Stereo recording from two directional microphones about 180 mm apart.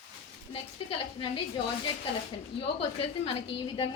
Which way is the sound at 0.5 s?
30° left (ahead or behind).